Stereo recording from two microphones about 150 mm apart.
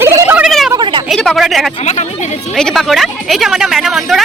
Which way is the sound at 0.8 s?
30° right (ahead or behind).